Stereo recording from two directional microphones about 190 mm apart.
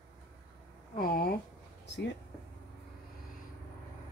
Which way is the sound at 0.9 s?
50° left (ahead or behind).